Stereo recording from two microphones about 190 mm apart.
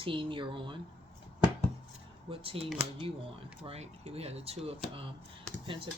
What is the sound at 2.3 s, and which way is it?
Speech, 30° right (ahead or behind).